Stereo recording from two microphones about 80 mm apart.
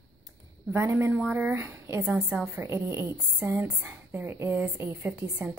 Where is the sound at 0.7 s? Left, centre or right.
Right.